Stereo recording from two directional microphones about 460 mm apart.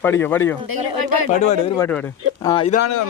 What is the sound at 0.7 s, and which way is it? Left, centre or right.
Speech, right.